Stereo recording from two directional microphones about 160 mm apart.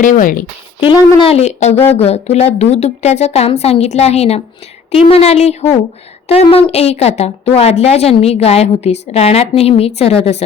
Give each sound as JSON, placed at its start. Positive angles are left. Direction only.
{"t": 0.0, "sound": "speech", "side_deg": 55}
{"t": 0.8, "sound": "a woman's voice", "side_deg": 30}
{"t": 1.7, "sound": "speech", "side_deg": 15}
{"t": 2.0, "sound": "a woman's voice", "side_deg": 40}